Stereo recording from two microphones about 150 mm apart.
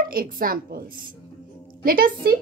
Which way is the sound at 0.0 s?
70° right (ahead or behind).